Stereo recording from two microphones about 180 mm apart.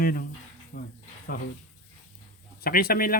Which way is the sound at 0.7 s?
70° left (ahead or behind).